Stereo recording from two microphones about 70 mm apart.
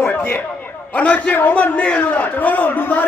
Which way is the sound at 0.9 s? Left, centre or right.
Centre.